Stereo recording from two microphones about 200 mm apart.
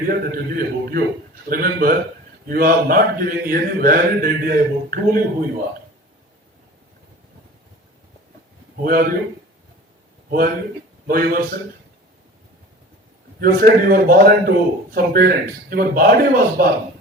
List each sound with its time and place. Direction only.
0.0 s speech: 45° right (ahead or behind)
8.8 s speech: 45° right (ahead or behind)
11.0 s a man's voice: 45° right (ahead or behind)
13.4 s speech: 45° right (ahead or behind)